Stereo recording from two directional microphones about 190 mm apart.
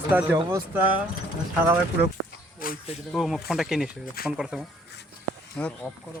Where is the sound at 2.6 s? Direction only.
50° left (ahead or behind).